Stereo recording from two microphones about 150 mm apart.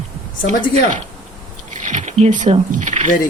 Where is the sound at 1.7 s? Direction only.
50° right (ahead or behind).